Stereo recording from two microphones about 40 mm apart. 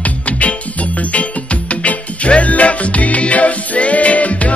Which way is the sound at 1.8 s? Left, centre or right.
Left.